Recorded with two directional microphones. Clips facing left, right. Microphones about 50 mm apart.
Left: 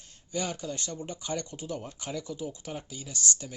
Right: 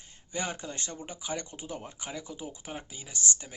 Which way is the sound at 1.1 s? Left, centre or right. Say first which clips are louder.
Left 2 dB; centre.